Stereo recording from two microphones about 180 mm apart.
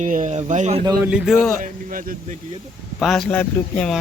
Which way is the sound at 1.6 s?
50° right (ahead or behind).